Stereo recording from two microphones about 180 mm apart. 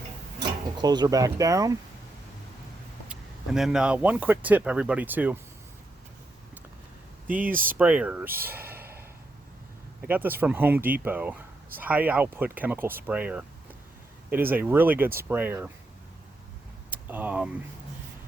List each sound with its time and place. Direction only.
0.8 s speech: 20° right (ahead or behind)
3.1 s speech: 5° right (ahead or behind)
7.8 s speech: 5° right (ahead or behind)
10.1 s speech: 10° right (ahead or behind)
16.9 s speech: 10° right (ahead or behind)